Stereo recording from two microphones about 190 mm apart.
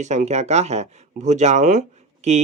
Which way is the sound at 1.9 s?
35° right (ahead or behind).